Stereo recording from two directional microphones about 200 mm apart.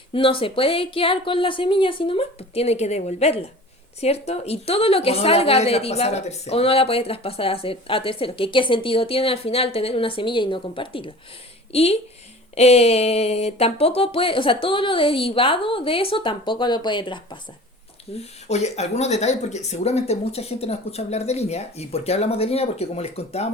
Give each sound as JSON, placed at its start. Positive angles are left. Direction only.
{"t": 0.1, "sound": "a woman's voice", "side_deg": 25}
{"t": 18.2, "sound": "speech", "side_deg": 35}